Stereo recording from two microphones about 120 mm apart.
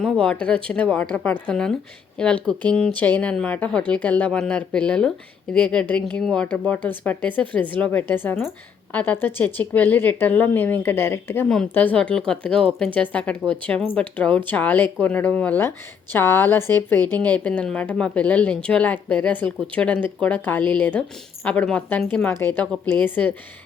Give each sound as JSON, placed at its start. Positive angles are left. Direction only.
{"t": 0.0, "sound": "a woman's voice", "side_deg": 5}